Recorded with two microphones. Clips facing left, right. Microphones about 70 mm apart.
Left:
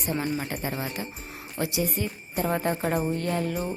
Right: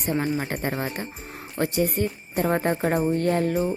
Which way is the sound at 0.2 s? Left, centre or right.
Right.